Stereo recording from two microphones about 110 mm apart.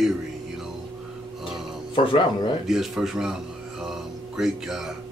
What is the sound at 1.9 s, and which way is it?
Speech, 50° left (ahead or behind).